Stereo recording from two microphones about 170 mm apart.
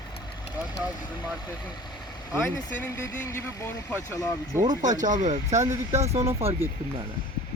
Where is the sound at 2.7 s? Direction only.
15° left (ahead or behind).